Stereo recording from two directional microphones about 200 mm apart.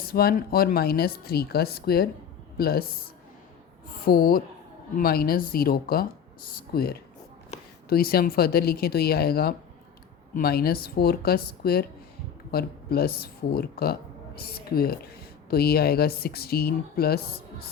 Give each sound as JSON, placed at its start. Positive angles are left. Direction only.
{"t": 0.1, "sound": "speech", "side_deg": 50}
{"t": 4.0, "sound": "speech", "side_deg": 45}
{"t": 7.5, "sound": "a sound", "side_deg": 35}
{"t": 7.9, "sound": "speech", "side_deg": 50}